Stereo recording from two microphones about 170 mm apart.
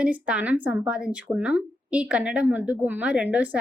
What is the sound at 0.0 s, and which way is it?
Speech, 5° right (ahead or behind).